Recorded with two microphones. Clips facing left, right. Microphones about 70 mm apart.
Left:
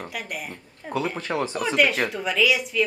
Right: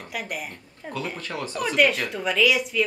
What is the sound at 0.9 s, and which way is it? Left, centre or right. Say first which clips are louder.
Speech: left 5 dB; centre.